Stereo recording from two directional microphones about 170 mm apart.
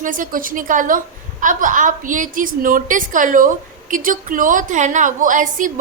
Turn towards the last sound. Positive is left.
turn(degrees=-50)  # may be behind; listen again after turning